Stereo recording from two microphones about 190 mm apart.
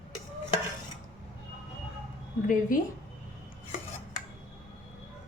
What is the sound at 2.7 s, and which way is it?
Speech, 45° left (ahead or behind).